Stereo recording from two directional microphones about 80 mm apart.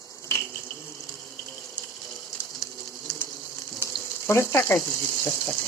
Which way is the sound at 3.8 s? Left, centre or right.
Left.